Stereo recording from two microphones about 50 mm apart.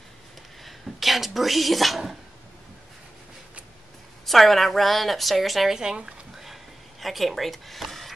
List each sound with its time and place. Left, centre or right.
0.7 s speech: centre
4.3 s speech: centre
5.8 s a sound: centre